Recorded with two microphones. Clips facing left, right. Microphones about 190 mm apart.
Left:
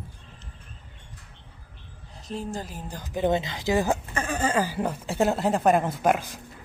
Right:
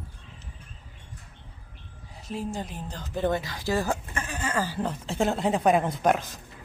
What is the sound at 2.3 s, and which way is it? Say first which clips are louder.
Speech: even; centre (ahead or behind).